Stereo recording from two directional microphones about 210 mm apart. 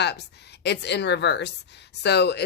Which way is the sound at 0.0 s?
55° left (ahead or behind).